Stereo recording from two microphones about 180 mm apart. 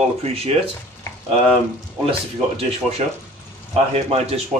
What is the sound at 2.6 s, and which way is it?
Speech, 35° right (ahead or behind).